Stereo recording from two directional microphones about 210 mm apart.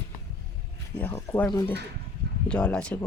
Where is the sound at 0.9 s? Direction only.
10° left (ahead or behind).